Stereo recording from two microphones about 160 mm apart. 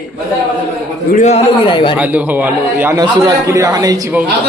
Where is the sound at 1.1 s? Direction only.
45° left (ahead or behind).